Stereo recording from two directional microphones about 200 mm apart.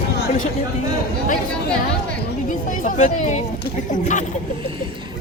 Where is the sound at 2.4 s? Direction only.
40° left (ahead or behind).